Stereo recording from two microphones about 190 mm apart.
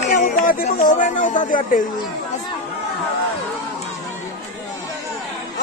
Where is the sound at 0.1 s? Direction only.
45° left (ahead or behind).